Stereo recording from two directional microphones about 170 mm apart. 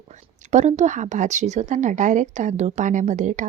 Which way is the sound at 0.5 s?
45° right (ahead or behind).